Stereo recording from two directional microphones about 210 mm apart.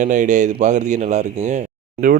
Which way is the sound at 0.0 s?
35° right (ahead or behind).